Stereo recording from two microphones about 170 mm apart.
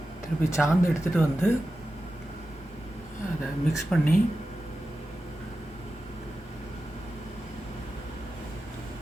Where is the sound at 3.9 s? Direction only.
Centre (ahead or behind).